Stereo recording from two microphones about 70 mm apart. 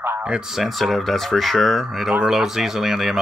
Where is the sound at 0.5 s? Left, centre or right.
Centre.